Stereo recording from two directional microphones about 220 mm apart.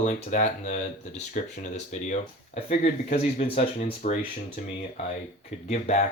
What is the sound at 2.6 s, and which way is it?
Speech, 35° left (ahead or behind).